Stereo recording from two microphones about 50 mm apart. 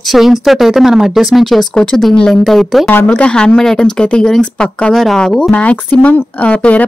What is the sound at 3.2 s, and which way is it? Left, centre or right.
Speech, left.